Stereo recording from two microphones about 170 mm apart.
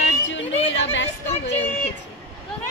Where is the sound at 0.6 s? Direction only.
90° left.